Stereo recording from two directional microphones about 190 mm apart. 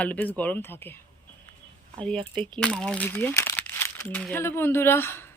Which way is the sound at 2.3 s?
5° left (ahead or behind).